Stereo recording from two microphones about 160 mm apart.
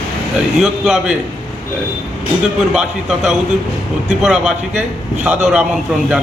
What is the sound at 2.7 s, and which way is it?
A man's voice, 5° right (ahead or behind).